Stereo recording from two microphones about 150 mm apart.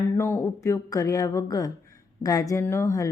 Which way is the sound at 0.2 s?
20° left (ahead or behind).